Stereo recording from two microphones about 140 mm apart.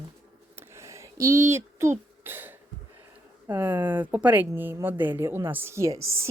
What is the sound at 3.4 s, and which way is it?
A woman's voice, 15° right (ahead or behind).